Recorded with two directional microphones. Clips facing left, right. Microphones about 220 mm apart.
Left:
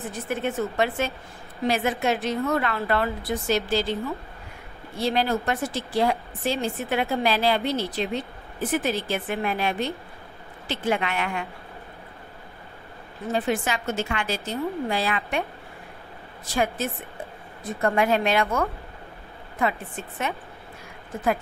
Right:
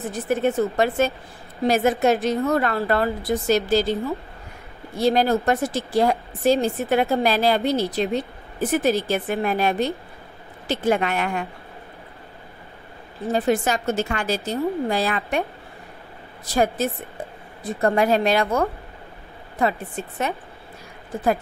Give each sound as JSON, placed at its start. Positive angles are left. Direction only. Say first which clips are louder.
{"t": 0.1, "sound": "speech", "louder": "right 7 dB", "side_deg": -40}
{"t": 4.9, "sound": "a woman's voice", "louder": "right 5 dB", "side_deg": -40}
{"t": 13.3, "sound": "speech", "louder": "right 4 dB", "side_deg": -40}
{"t": 16.4, "sound": "speech", "louder": "right 4 dB", "side_deg": -40}